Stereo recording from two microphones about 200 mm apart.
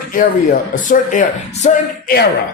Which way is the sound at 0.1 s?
40° left (ahead or behind).